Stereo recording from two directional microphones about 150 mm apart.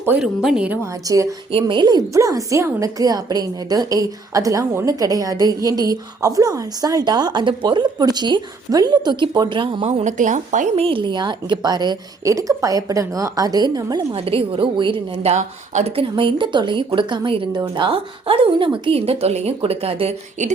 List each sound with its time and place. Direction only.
0.0 s speech: 10° right (ahead or behind)
1.0 s a woman's voice: 20° right (ahead or behind)
9.8 s a woman's voice: 55° right (ahead or behind)
10.8 s a woman's voice: 35° right (ahead or behind)
14.2 s a woman's voice: 40° right (ahead or behind)
16.0 s a woman's voice: 35° right (ahead or behind)